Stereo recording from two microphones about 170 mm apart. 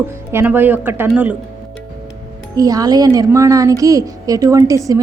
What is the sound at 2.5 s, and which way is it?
A woman's voice, 20° right (ahead or behind).